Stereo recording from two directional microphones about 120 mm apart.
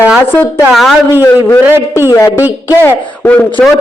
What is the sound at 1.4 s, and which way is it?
Speech, 15° left (ahead or behind).